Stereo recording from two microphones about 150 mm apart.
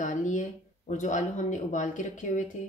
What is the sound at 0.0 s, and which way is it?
Speech, 55° left (ahead or behind).